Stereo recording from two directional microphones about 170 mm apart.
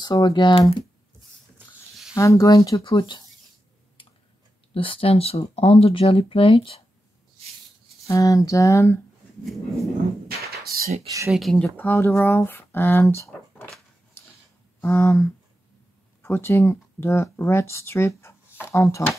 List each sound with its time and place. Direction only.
0.0 s speech: 25° left (ahead or behind)
2.1 s speech: 20° left (ahead or behind)
4.7 s speech: 35° left (ahead or behind)
8.1 s speech: 20° left (ahead or behind)
10.7 s a sound: 60° right (ahead or behind)
11.2 s speech: centre (ahead or behind); by 13.7 s 15° left (ahead or behind)
14.8 s speech: 15° left (ahead or behind)